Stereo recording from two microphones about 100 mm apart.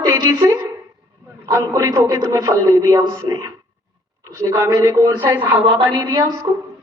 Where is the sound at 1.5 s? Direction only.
35° right (ahead or behind).